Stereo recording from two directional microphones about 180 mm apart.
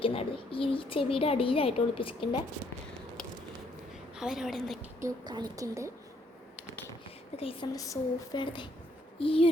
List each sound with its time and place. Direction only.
0.0 s speech: 30° left (ahead or behind)
4.2 s a woman's voice: centre (ahead or behind)
4.9 s a woman's voice: 20° right (ahead or behind)
7.3 s a woman's voice: 30° left (ahead or behind)